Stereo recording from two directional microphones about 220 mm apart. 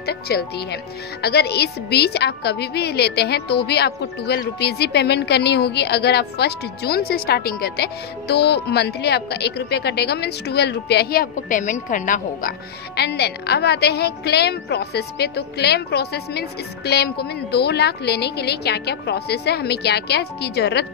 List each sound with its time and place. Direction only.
0.0 s a woman's voice: 45° left (ahead or behind)